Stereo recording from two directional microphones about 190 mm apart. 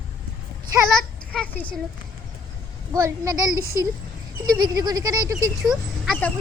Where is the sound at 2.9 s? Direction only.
15° right (ahead or behind).